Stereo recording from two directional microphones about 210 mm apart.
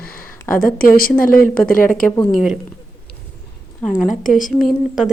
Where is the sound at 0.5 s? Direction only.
40° left (ahead or behind).